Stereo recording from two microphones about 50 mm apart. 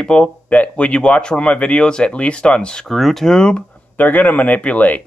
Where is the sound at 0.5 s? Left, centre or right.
Left.